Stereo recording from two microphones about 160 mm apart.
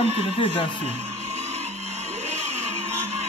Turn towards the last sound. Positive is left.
turn(degrees=-40)  # may be behind; listen again after turning